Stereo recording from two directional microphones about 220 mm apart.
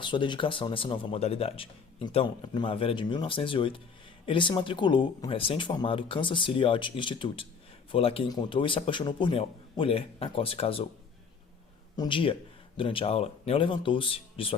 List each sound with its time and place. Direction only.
0.0 s speech: 20° left (ahead or behind)
11.9 s speech: 20° left (ahead or behind)